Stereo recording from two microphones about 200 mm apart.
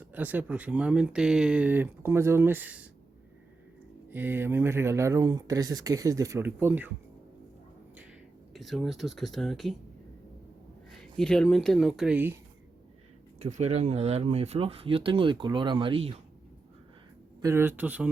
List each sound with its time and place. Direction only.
0.0 s speech: 10° right (ahead or behind)
4.1 s speech: 10° right (ahead or behind)
8.5 s speech: centre (ahead or behind)
11.2 s speech: 5° left (ahead or behind)
13.4 s speech: 35° right (ahead or behind)
17.4 s speech: 10° right (ahead or behind)